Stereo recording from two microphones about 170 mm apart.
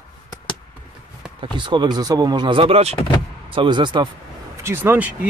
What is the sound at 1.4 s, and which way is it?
Speech, 25° right (ahead or behind).